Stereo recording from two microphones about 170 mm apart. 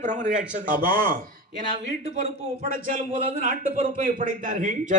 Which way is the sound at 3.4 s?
50° right (ahead or behind).